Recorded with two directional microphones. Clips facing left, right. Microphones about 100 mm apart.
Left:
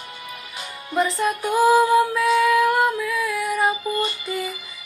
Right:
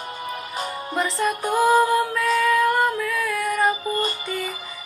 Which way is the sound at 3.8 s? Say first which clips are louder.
Even; 40° right (ahead or behind).